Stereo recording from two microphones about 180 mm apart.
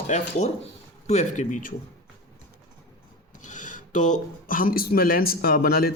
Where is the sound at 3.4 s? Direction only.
45° left (ahead or behind).